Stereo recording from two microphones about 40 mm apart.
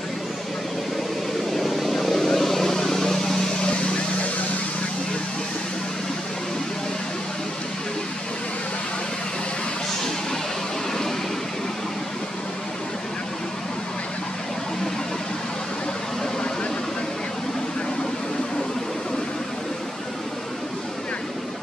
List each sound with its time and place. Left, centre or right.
1.5 s vehicle: centre
3.6 s vehicle: left